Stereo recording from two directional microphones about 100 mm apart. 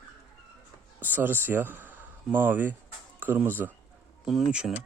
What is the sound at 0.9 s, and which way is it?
Speech, 20° right (ahead or behind).